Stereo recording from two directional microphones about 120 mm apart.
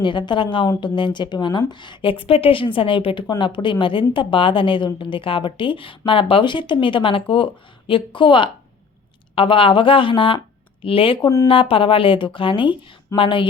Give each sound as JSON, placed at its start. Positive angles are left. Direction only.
{"t": 0.0, "sound": "a woman's voice", "side_deg": 40}
{"t": 11.2, "sound": "speech", "side_deg": 25}
{"t": 11.4, "sound": "a woman's voice", "side_deg": 50}